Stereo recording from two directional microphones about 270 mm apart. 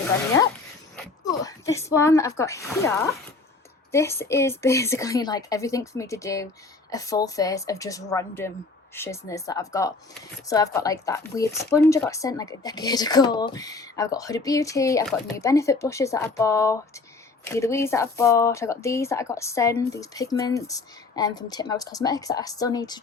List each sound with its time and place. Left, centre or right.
1.2 s speech: centre
3.9 s speech: centre